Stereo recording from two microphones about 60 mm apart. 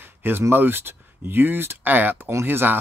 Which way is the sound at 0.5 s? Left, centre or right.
Right.